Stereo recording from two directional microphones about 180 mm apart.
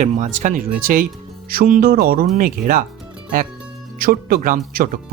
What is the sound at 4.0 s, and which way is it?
Speech, 55° right (ahead or behind).